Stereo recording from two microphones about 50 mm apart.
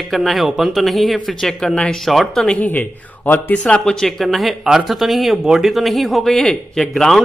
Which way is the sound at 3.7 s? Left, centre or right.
Left.